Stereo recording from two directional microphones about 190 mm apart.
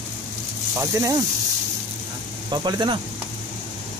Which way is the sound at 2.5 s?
25° right (ahead or behind).